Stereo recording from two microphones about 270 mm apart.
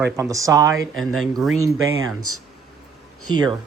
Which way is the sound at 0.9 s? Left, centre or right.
Right.